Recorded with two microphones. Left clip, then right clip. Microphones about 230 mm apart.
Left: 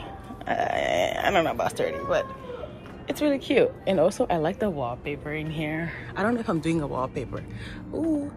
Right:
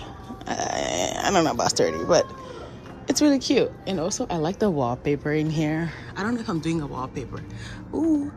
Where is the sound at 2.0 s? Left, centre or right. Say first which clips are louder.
Right 6 dB; right.